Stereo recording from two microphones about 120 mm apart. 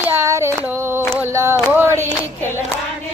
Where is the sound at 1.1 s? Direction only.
20° right (ahead or behind).